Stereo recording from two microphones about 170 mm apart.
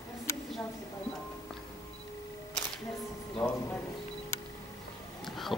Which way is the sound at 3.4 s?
20° left (ahead or behind).